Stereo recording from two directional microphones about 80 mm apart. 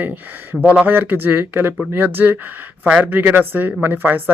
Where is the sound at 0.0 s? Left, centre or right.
Right.